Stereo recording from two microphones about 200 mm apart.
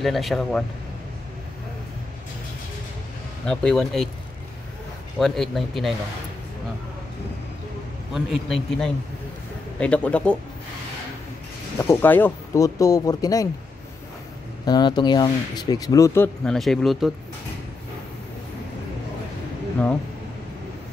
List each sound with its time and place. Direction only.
0.0 s a man's voice: centre (ahead or behind)
3.4 s a man's voice: 5° left (ahead or behind)
5.2 s a man's voice: centre (ahead or behind)
8.1 s a man's voice: centre (ahead or behind)
11.8 s speech: 10° left (ahead or behind)
14.7 s speech: 20° left (ahead or behind)
16.4 s a man's voice: centre (ahead or behind)